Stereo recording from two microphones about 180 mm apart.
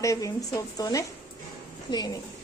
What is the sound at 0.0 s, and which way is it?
Speech, 15° left (ahead or behind).